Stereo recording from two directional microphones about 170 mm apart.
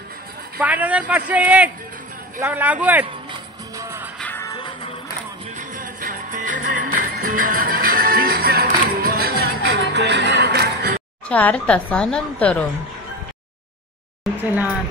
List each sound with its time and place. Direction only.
0.6 s a man's voice: 10° right (ahead or behind)
3.3 s music: 20° right (ahead or behind)
4.2 s music: 15° left (ahead or behind)
4.6 s music: 30° left (ahead or behind)
5.6 s music: 55° right (ahead or behind)
11.2 s a woman's voice: 10° left (ahead or behind)